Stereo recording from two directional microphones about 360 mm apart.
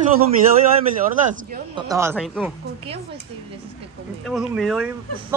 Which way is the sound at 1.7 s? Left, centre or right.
Centre.